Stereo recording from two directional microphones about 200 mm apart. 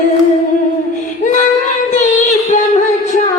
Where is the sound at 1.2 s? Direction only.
35° left (ahead or behind).